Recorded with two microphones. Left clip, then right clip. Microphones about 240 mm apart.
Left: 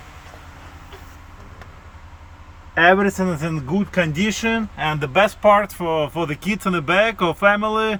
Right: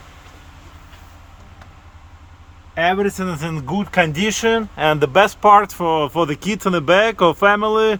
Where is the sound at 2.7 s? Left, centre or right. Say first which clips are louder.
Left 3 dB; centre.